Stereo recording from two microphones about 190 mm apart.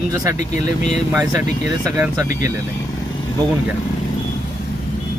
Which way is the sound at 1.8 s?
10° right (ahead or behind).